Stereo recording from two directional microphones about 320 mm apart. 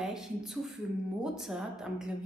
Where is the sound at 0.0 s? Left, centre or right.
Centre.